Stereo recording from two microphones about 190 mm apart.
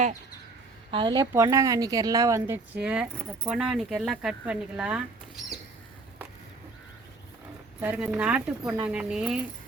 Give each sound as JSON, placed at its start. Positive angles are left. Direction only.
{"t": 0.9, "sound": "a woman's voice", "side_deg": -25}
{"t": 2.8, "sound": "speech", "side_deg": -5}
{"t": 7.8, "sound": "speech", "side_deg": -10}